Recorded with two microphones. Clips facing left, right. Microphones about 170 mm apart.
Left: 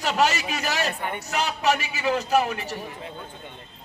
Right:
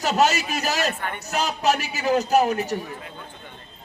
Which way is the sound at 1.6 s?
40° right (ahead or behind).